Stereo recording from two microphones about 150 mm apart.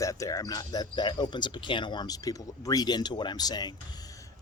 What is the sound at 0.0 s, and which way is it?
Speech, 20° left (ahead or behind).